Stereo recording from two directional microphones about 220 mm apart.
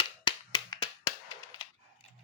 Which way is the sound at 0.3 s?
20° left (ahead or behind).